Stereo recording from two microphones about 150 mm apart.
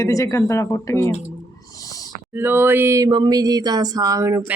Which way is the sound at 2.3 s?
15° right (ahead or behind).